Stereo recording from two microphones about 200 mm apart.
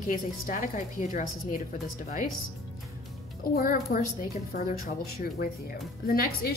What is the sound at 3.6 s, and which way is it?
A woman's voice, 45° left (ahead or behind).